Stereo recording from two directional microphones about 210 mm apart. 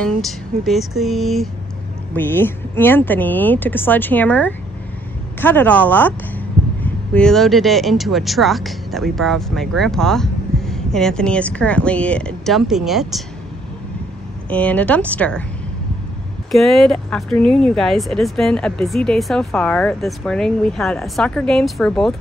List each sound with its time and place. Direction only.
0.0 s speech: centre (ahead or behind)
14.5 s speech: 5° left (ahead or behind)
16.5 s speech: centre (ahead or behind)